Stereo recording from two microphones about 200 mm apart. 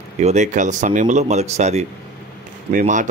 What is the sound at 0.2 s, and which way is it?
A man's voice, 35° right (ahead or behind).